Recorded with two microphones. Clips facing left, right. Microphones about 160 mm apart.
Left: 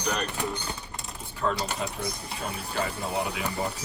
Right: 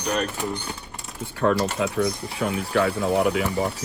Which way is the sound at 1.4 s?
75° right (ahead or behind).